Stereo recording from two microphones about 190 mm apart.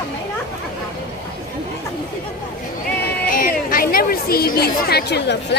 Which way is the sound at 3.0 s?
55° left (ahead or behind).